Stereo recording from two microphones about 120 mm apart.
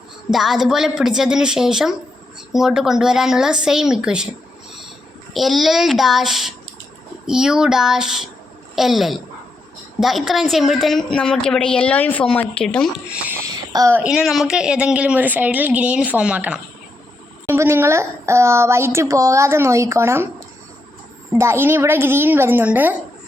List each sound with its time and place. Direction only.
0.3 s a woman's voice: centre (ahead or behind)
5.3 s a woman's voice: centre (ahead or behind)
13.1 s speech: 10° right (ahead or behind)
13.5 s a sound: 35° right (ahead or behind)
13.9 s speech: 10° right (ahead or behind)
17.4 s a woman's voice: 20° right (ahead or behind)
21.3 s a woman's voice: 20° right (ahead or behind)